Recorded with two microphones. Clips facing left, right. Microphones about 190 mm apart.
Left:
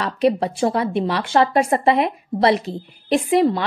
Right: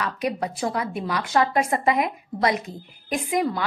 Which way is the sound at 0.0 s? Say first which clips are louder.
Left 8 dB; 30° left (ahead or behind).